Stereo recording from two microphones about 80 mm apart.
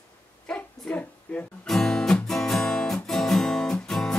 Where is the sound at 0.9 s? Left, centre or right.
Centre.